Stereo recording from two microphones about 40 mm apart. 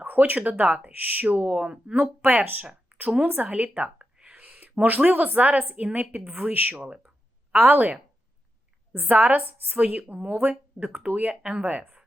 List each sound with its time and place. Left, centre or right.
0.0 s a sound: right
0.3 s a woman's voice: right
1.3 s speech: right
2.2 s a woman's voice: right
2.9 s a sound: right
3.3 s speech: right
3.9 s a sound: right
4.9 s a woman's voice: right
6.7 s speech: right
7.6 s a woman's voice: right
9.0 s a woman's voice: right